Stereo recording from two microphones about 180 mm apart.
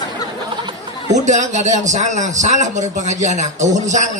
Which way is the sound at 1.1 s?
40° right (ahead or behind).